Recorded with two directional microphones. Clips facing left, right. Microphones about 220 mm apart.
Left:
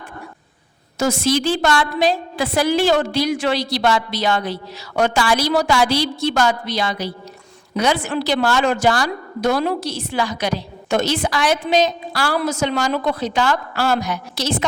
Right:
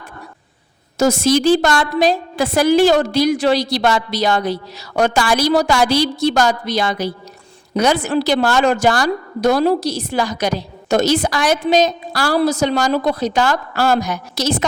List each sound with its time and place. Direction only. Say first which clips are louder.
0.9 s a woman's voice: right 4 dB; 40° right (ahead or behind)